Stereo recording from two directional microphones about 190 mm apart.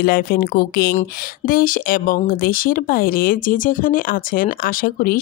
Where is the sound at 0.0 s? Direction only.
50° left (ahead or behind).